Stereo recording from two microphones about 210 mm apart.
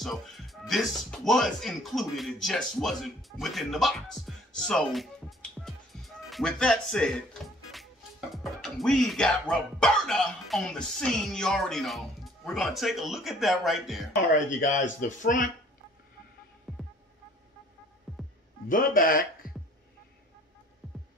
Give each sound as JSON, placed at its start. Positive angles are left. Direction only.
{"t": 0.0, "sound": "speech", "side_deg": 0}
{"t": 15.0, "sound": "speech", "side_deg": 40}
{"t": 16.7, "sound": "music", "side_deg": 0}
{"t": 18.1, "sound": "music", "side_deg": 0}
{"t": 18.7, "sound": "speech", "side_deg": 40}
{"t": 19.4, "sound": "music", "side_deg": 40}